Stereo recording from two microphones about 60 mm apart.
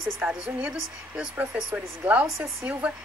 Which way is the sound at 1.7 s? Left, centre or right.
Right.